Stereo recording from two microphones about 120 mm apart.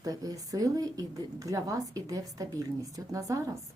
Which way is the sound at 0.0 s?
30° right (ahead or behind).